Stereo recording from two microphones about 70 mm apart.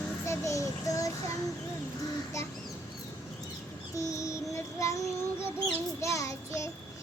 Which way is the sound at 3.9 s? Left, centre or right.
Left.